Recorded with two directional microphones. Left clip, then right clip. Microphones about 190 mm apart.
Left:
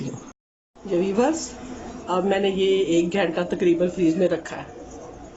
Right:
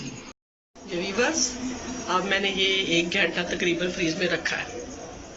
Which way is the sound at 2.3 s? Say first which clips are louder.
Left 4 dB; 35° left (ahead or behind).